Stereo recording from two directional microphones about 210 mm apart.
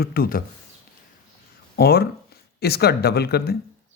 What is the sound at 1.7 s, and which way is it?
A man's voice, 50° left (ahead or behind).